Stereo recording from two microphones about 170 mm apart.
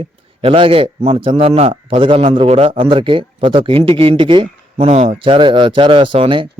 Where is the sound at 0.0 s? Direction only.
30° right (ahead or behind).